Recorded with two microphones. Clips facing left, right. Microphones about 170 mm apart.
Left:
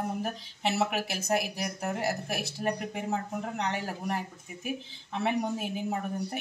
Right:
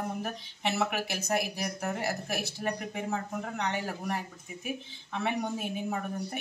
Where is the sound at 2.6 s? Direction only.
25° left (ahead or behind).